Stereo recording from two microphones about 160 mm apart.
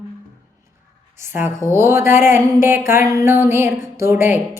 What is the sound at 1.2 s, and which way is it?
A woman's voice, 15° right (ahead or behind).